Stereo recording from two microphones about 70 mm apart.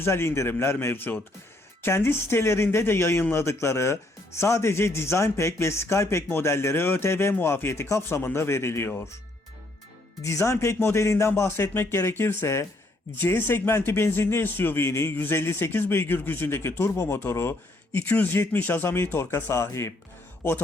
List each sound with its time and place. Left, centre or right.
0.0 s speech: left
10.2 s speech: left